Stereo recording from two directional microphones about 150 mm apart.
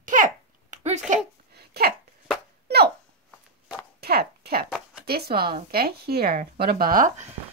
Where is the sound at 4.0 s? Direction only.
90° right.